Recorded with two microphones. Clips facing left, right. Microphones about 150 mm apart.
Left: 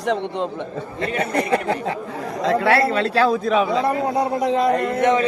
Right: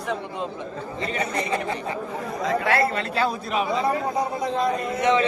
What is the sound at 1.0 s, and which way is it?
Speech, 60° left (ahead or behind).